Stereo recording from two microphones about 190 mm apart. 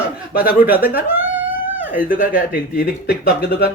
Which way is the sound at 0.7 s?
10° right (ahead or behind).